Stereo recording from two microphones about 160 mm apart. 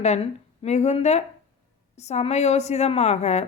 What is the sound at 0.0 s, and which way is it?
A woman's voice, 45° left (ahead or behind).